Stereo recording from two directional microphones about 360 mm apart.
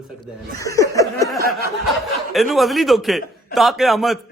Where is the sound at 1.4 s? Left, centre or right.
Right.